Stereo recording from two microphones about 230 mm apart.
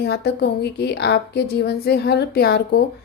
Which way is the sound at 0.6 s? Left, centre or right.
Left.